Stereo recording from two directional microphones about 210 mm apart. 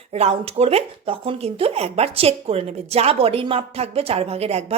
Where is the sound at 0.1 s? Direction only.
30° right (ahead or behind).